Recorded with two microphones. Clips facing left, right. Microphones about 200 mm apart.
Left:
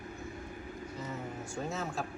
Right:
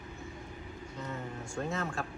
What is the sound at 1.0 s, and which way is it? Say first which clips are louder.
Music: right 1 dB; centre (ahead or behind).